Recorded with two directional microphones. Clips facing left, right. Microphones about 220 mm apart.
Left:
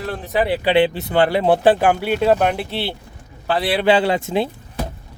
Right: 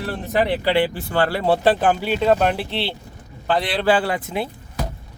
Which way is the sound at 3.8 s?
20° left (ahead or behind).